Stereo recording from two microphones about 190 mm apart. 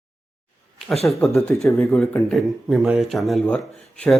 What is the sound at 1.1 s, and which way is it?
Speech, centre (ahead or behind).